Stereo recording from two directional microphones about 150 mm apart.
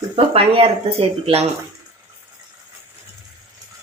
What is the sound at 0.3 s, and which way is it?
Speech, 40° right (ahead or behind).